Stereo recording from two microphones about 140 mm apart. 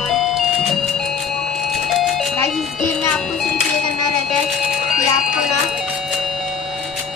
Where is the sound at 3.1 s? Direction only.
10° left (ahead or behind).